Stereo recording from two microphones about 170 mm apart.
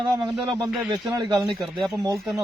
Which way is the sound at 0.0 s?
25° right (ahead or behind).